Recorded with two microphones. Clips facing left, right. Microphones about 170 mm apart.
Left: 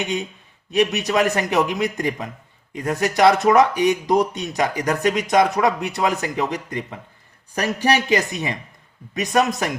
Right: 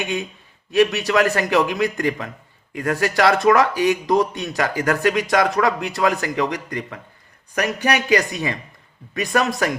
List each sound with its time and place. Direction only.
0.7 s speech: 20° left (ahead or behind)